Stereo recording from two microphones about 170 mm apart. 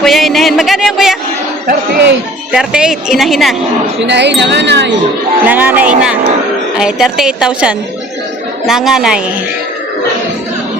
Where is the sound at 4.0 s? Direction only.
90° right.